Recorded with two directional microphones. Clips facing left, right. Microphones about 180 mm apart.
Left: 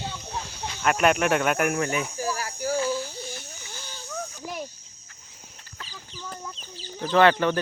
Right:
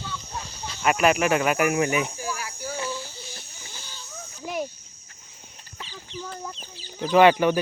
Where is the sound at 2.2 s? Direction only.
40° left (ahead or behind).